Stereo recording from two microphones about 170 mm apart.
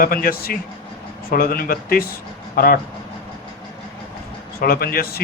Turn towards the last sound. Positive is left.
turn(degrees=65)  # may be behind; listen again after turning